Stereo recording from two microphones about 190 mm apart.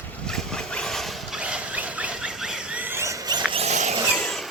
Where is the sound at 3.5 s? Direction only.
35° right (ahead or behind).